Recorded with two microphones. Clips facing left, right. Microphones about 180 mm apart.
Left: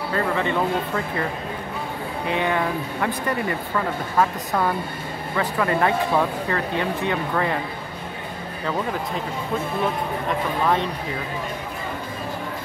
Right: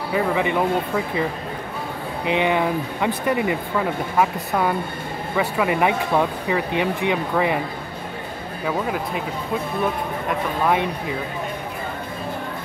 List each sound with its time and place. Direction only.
0.1 s speech: 10° right (ahead or behind)
2.2 s speech: 20° right (ahead or behind)
5.3 s speech: 10° right (ahead or behind)
8.6 s speech: 5° right (ahead or behind)